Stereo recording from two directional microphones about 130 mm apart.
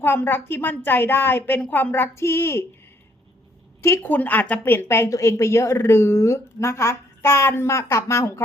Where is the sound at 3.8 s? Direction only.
20° left (ahead or behind).